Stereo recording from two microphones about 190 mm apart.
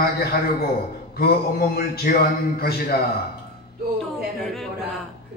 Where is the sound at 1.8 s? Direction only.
55° left (ahead or behind).